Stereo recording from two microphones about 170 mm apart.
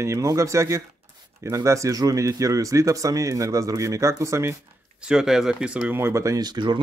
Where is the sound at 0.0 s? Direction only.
20° right (ahead or behind).